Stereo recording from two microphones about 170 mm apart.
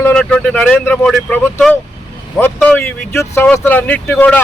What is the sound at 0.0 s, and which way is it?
Speech, 5° left (ahead or behind).